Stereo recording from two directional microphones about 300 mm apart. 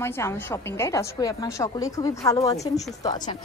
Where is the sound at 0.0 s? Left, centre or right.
Centre.